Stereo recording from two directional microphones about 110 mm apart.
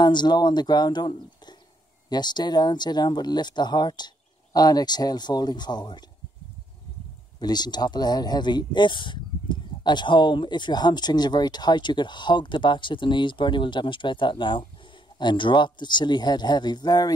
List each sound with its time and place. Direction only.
0.0 s speech: 40° left (ahead or behind)
7.3 s speech: 40° left (ahead or behind)